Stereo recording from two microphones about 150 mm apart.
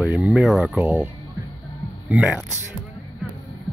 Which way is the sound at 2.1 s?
10° right (ahead or behind).